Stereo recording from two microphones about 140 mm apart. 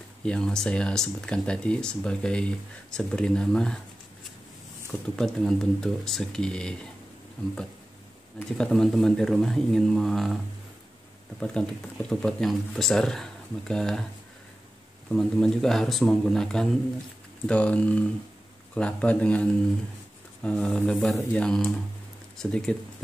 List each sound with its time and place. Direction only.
0.2 s speech: 5° left (ahead or behind)
5.1 s speech: centre (ahead or behind)
8.5 s speech: 5° left (ahead or behind)
11.3 s speech: 5° left (ahead or behind)
15.0 s speech: 5° left (ahead or behind)